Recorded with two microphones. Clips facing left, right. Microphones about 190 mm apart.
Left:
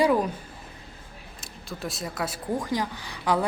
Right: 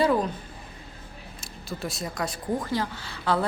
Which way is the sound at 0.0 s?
10° left (ahead or behind).